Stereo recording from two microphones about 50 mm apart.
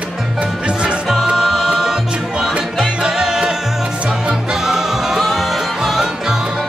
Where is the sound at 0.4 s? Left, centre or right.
Right.